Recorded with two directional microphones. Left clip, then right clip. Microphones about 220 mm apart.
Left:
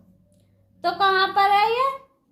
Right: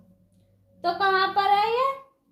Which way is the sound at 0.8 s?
25° left (ahead or behind).